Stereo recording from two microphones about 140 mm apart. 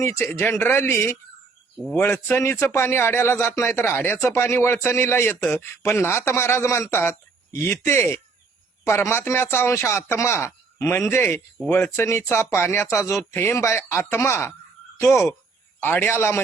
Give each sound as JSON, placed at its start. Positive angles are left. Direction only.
{"t": 0.0, "sound": "speech", "side_deg": 20}
{"t": 11.9, "sound": "speech", "side_deg": 20}